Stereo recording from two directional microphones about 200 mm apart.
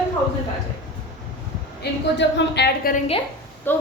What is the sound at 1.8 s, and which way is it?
A woman's voice, 55° left (ahead or behind).